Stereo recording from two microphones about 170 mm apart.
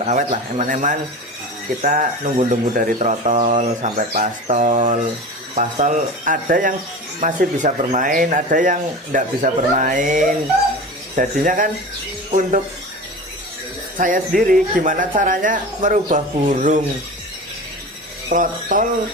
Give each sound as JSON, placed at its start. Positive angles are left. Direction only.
{"t": 0.0, "sound": "speech", "side_deg": -45}
{"t": 14.0, "sound": "speech", "side_deg": -55}
{"t": 18.3, "sound": "speech", "side_deg": -50}